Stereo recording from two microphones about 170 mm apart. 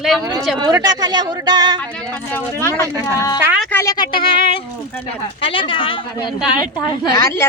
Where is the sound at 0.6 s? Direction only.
25° right (ahead or behind).